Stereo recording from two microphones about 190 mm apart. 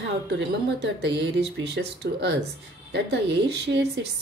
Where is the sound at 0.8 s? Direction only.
65° right (ahead or behind).